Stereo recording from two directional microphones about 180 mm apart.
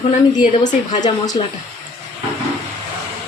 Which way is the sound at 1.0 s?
20° left (ahead or behind).